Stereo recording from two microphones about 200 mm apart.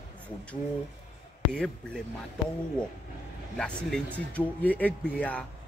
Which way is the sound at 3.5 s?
5° left (ahead or behind).